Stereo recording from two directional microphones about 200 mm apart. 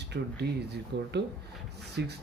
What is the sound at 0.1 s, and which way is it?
A man's voice, 55° right (ahead or behind).